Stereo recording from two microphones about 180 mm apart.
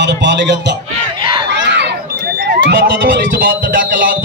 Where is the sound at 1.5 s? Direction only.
75° right (ahead or behind).